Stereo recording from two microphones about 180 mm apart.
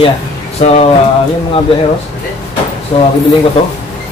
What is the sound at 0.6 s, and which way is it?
Speech, 30° left (ahead or behind).